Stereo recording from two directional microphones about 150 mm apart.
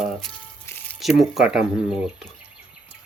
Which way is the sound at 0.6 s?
15° left (ahead or behind).